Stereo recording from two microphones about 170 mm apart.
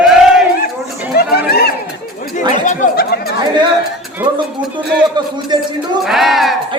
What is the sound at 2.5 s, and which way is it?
Speech, 45° left (ahead or behind).